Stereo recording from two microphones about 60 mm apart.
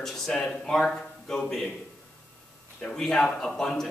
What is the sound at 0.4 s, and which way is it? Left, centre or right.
A man's voice, centre.